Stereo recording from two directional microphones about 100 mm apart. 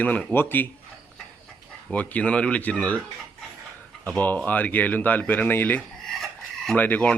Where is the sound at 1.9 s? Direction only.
15° left (ahead or behind).